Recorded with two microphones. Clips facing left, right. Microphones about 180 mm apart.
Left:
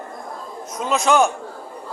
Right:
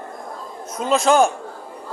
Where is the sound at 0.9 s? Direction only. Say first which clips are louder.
Right 2 dB; 30° right (ahead or behind).